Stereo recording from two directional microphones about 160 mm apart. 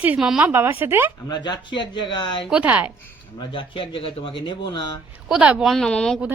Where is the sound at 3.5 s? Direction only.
30° left (ahead or behind).